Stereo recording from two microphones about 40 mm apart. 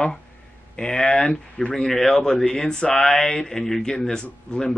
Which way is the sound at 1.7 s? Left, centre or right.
Centre.